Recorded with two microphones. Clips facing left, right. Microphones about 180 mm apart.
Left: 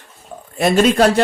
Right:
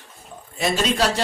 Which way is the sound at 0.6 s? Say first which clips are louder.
Left 8 dB; 55° left (ahead or behind).